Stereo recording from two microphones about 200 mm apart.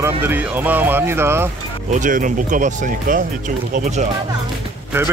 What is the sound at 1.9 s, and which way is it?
Speech, 40° right (ahead or behind).